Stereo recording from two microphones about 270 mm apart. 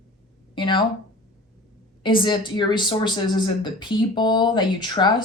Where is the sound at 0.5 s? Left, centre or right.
Centre.